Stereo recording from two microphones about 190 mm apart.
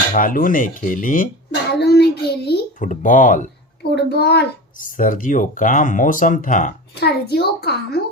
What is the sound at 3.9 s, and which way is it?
A child's voice, 60° left (ahead or behind).